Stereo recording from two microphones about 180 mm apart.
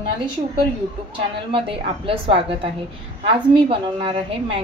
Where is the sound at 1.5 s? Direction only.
30° right (ahead or behind).